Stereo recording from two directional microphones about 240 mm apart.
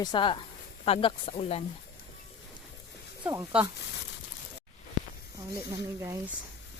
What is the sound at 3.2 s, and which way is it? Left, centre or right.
Speech, centre.